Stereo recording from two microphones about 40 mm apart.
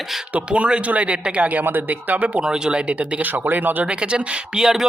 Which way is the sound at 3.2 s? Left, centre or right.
Right.